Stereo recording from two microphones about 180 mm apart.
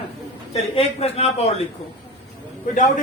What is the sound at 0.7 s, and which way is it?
Speech, 35° left (ahead or behind).